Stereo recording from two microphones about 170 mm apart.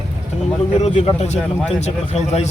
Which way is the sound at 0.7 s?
35° left (ahead or behind).